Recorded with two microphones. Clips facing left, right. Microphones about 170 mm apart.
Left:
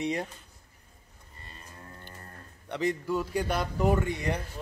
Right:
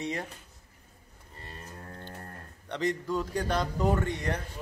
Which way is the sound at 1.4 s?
60° right (ahead or behind).